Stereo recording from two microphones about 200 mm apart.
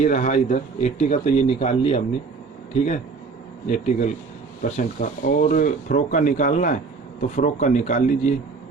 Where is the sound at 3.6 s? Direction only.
35° left (ahead or behind).